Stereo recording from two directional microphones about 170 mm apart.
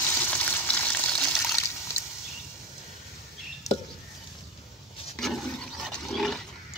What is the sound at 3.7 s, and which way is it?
Chop, 20° left (ahead or behind).